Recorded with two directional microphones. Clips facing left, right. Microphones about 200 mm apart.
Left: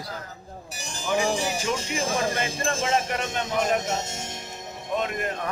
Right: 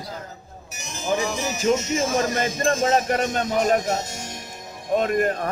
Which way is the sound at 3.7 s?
25° left (ahead or behind).